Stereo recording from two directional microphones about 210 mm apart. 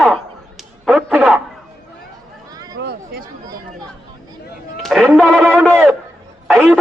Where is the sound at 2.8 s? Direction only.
55° right (ahead or behind).